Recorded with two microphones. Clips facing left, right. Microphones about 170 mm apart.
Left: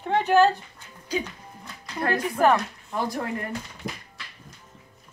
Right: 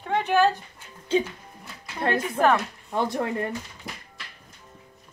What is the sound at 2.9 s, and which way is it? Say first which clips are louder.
Speech: right 3 dB; 25° right (ahead or behind).